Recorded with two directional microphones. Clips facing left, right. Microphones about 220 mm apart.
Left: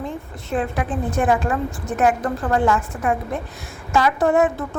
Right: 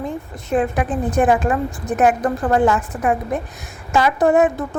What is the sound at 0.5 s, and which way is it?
A woman's voice, 15° right (ahead or behind).